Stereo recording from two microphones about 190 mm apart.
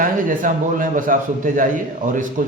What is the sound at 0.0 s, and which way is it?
A man's voice, 45° right (ahead or behind).